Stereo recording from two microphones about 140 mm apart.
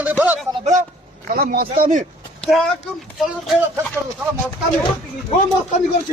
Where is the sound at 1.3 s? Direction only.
90° right; by 2.1 s 75° right (ahead or behind).